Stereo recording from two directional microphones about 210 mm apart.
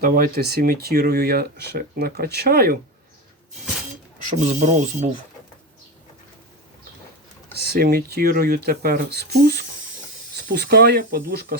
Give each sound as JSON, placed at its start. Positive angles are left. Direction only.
{"t": 0.0, "sound": "speech", "side_deg": -45}
{"t": 4.3, "sound": "speech", "side_deg": -35}
{"t": 7.6, "sound": "speech", "side_deg": -50}